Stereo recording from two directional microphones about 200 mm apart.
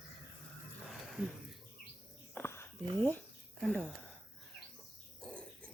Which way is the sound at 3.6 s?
5° left (ahead or behind).